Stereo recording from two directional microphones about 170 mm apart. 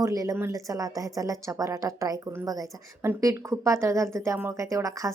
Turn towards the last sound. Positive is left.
turn(degrees=-20)  # may be behind; listen again after turning